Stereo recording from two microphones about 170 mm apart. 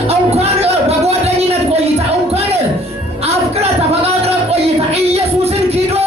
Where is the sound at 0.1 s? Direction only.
40° right (ahead or behind).